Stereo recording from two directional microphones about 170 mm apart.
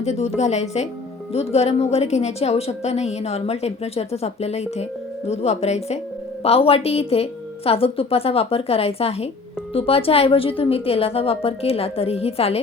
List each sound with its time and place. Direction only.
0.0 s a woman's voice: 40° left (ahead or behind)